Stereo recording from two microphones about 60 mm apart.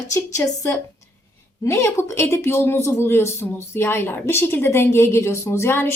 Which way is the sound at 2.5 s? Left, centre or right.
Left.